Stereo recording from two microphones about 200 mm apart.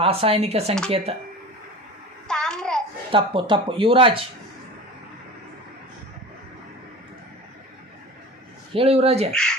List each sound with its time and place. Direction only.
0.0 s speech: 30° right (ahead or behind)
2.2 s child singing: 5° left (ahead or behind)
3.1 s speech: 25° right (ahead or behind)
8.7 s speech: 30° right (ahead or behind)
9.3 s speech: 5° left (ahead or behind)